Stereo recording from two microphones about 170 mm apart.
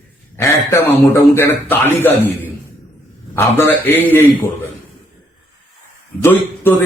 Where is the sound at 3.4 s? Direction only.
15° left (ahead or behind).